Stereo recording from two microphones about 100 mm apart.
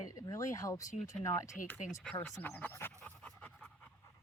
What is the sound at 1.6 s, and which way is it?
Speech, 15° left (ahead or behind).